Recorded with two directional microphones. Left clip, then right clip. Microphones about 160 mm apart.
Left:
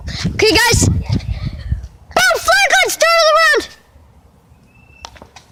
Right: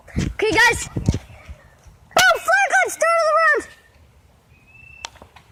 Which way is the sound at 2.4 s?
20° left (ahead or behind).